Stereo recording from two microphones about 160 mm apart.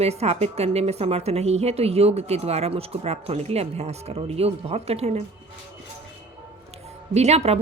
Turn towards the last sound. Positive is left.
turn(degrees=-40)  # may be behind; listen again after turning